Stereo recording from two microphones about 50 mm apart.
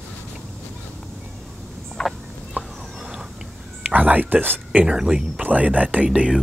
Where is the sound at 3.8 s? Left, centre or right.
Right.